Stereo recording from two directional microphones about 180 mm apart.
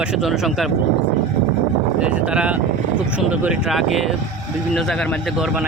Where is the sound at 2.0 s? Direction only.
5° right (ahead or behind).